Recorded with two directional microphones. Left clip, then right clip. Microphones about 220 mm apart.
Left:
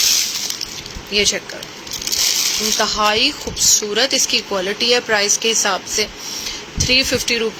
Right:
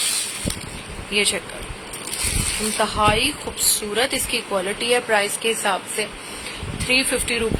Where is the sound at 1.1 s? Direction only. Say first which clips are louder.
Left 4 dB; 10° left (ahead or behind).